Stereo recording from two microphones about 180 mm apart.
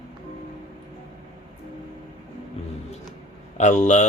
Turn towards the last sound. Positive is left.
turn(degrees=40)  # may be behind; listen again after turning